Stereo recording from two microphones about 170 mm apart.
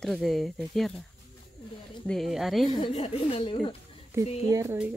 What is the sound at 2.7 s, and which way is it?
Speech, 35° left (ahead or behind).